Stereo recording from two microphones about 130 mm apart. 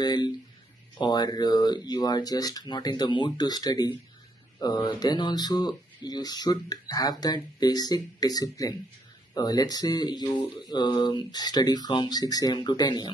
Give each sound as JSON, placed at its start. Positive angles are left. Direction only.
{"t": 0.0, "sound": "speech", "side_deg": 30}